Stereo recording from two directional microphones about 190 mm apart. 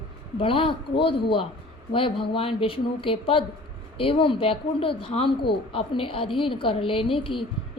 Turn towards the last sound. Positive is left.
turn(degrees=25)  # may be behind; listen again after turning